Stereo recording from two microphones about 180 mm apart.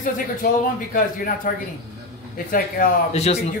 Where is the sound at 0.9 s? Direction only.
50° left (ahead or behind).